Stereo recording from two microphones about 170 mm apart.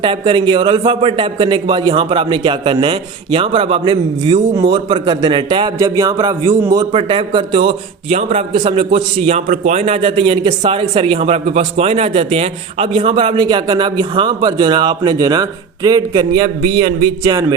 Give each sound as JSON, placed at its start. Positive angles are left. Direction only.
{"t": 0.0, "sound": "a man's voice", "side_deg": -30}